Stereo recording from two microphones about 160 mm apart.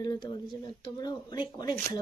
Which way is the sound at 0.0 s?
25° left (ahead or behind).